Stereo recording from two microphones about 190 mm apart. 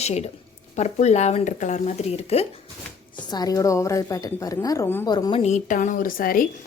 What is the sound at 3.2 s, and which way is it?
A woman's voice, 20° left (ahead or behind).